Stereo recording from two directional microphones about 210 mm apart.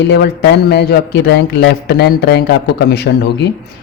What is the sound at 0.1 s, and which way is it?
Speech, 50° left (ahead or behind).